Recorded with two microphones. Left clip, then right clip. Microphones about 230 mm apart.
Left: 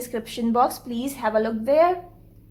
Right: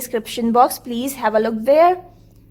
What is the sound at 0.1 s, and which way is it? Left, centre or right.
A woman's voice, right.